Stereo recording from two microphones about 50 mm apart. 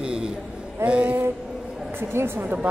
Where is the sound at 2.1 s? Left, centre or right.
Right.